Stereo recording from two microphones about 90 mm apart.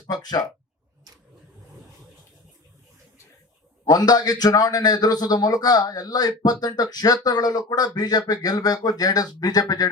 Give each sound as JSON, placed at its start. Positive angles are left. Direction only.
{"t": 0.1, "sound": "a man's voice", "side_deg": 50}
{"t": 3.8, "sound": "a man's voice", "side_deg": 45}